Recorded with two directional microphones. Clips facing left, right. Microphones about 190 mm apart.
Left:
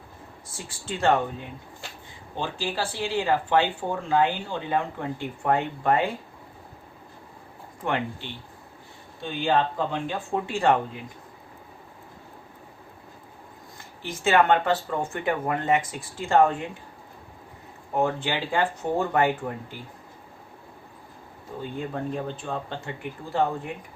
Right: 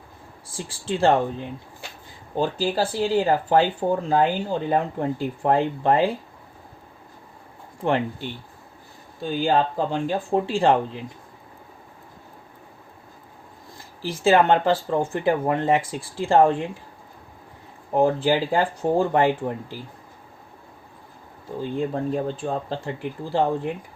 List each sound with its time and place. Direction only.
0.5 s speech: 30° right (ahead or behind)
7.9 s speech: 35° right (ahead or behind)
13.7 s speech: 35° right (ahead or behind)
17.9 s speech: 35° right (ahead or behind)
21.6 s speech: 30° right (ahead or behind)